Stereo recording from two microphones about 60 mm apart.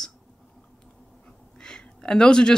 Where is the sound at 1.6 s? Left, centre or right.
Centre.